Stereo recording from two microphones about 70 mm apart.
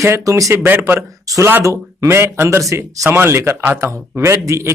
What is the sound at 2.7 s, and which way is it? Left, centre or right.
Speech, right.